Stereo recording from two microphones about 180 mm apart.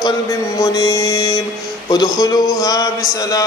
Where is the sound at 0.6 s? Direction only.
20° left (ahead or behind).